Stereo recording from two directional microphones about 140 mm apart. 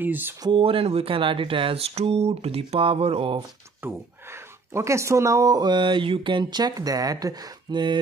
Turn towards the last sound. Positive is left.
turn(degrees=-30)  # may be behind; listen again after turning